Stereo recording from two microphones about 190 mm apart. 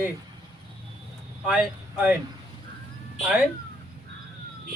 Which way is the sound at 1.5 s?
5° right (ahead or behind).